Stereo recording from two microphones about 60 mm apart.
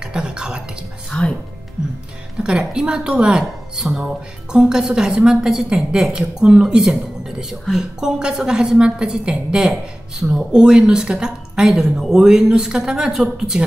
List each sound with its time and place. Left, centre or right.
0.0 s beatboxing: centre
1.1 s speech: centre
2.4 s a woman's voice: centre